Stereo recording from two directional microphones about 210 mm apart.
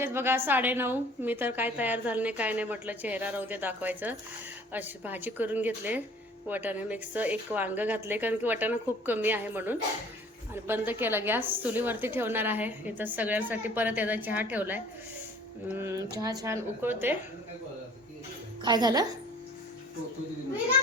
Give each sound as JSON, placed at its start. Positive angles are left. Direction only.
{"t": 0.0, "sound": "a woman's voice", "side_deg": -10}
{"t": 18.6, "sound": "a woman's voice", "side_deg": -20}